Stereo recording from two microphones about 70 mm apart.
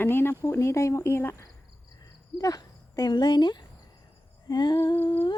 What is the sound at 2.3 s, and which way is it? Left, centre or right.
Speech, left.